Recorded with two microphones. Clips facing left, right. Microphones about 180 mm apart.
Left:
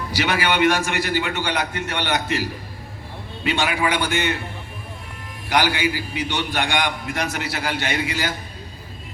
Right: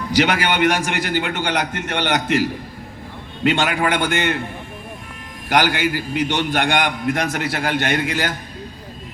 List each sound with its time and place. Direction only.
0.5 s a man's voice: 50° right (ahead or behind)
5.5 s a man's voice: 50° right (ahead or behind)